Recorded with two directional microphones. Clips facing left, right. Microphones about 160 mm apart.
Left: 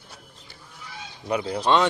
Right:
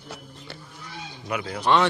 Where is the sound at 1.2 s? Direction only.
30° left (ahead or behind).